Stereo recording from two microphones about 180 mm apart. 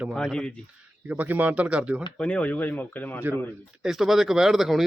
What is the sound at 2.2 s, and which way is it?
Speech, 5° left (ahead or behind).